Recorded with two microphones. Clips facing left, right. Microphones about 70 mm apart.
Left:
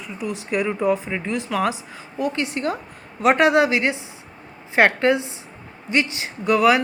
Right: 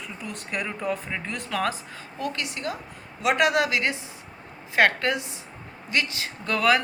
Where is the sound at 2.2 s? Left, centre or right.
Left.